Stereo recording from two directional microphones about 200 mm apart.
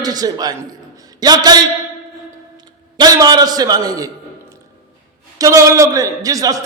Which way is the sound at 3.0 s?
20° right (ahead or behind).